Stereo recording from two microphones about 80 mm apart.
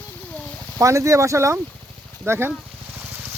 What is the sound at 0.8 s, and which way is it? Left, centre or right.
Speech, right.